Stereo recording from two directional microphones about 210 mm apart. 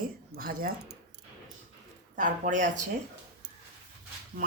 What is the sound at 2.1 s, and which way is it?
Speech, 35° right (ahead or behind).